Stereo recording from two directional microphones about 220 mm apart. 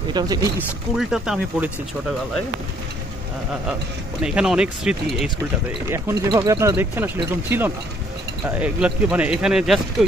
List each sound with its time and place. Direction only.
0.1 s speech: 20° right (ahead or behind)
0.6 s speech: 5° right (ahead or behind)
4.2 s speech: 5° right (ahead or behind)